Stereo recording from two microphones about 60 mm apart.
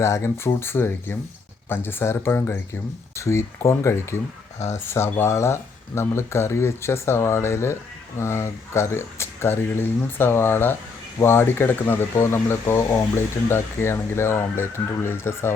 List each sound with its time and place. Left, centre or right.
0.0 s speech: left
3.2 s speech: left